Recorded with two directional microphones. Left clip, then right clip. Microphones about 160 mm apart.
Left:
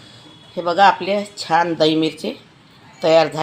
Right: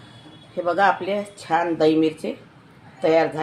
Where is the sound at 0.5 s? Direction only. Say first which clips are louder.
Left 5 dB; 75° left (ahead or behind).